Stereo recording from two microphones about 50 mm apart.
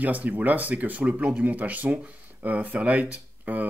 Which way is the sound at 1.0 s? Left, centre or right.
Right.